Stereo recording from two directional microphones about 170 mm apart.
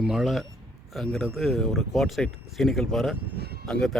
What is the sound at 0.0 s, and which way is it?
Speech, centre (ahead or behind).